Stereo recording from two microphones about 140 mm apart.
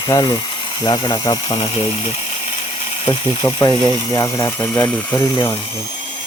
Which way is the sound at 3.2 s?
30° left (ahead or behind).